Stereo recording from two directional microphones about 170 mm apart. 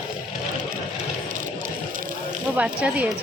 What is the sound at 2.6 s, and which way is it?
Speech, 5° right (ahead or behind).